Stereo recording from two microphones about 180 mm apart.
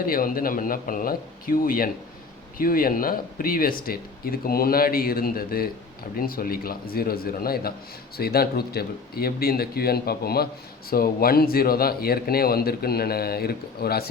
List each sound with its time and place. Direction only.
0.0 s a man's voice: 55° left (ahead or behind)